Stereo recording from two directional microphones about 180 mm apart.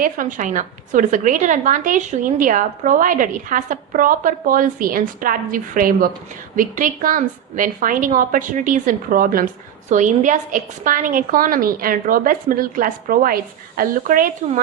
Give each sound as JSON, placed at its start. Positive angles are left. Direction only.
{"t": 0.0, "sound": "a woman's voice", "side_deg": -45}